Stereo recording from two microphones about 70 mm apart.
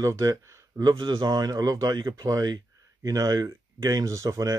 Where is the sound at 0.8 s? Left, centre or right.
Right.